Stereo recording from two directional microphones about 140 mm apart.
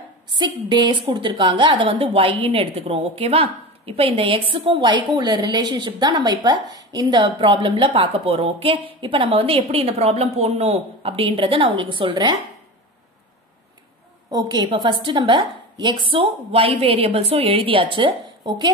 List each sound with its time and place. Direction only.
0.3 s a woman's voice: 30° right (ahead or behind)
14.3 s a woman's voice: 30° right (ahead or behind)